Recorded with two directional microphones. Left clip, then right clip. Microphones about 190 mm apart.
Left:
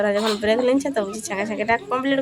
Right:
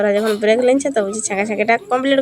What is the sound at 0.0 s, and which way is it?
A woman's voice, 10° right (ahead or behind).